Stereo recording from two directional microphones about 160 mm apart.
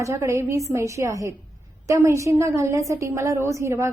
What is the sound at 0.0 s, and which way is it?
A woman's voice, 15° right (ahead or behind).